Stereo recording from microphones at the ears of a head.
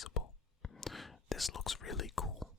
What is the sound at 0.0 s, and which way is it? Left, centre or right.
Whispering, left.